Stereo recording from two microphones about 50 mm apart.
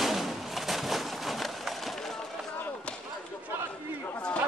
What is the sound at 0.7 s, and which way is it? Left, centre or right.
Bird, centre.